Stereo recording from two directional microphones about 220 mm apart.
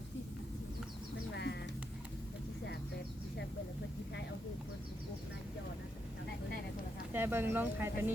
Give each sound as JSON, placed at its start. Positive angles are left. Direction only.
{"t": 1.3, "sound": "music", "side_deg": 50}
{"t": 7.1, "sound": "speech", "side_deg": -10}